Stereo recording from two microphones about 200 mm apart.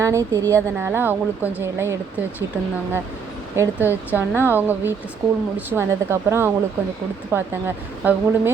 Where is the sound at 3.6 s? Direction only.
10° right (ahead or behind).